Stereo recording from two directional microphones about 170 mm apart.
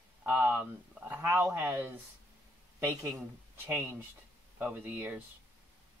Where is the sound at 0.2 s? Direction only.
10° right (ahead or behind).